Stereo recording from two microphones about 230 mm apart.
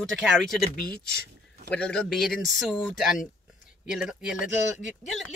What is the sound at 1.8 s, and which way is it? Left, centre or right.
Speech, centre.